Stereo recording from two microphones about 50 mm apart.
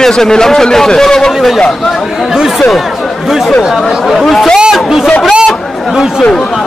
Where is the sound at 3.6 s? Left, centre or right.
Centre.